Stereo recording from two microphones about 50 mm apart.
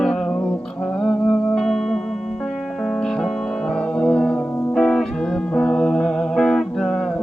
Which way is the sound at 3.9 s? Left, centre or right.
Centre.